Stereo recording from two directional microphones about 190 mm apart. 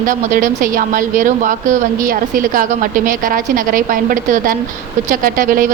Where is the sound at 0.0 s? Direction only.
45° right (ahead or behind).